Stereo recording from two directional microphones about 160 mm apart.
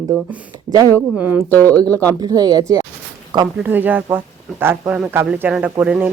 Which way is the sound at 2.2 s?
25° right (ahead or behind).